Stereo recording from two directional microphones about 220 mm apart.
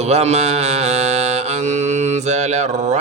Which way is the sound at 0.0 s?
30° right (ahead or behind).